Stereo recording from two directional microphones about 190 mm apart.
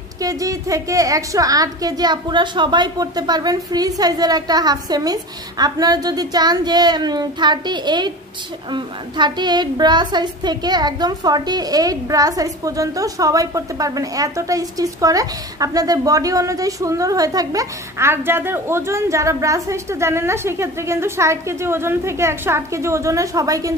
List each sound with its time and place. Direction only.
0.2 s a woman's voice: 20° right (ahead or behind)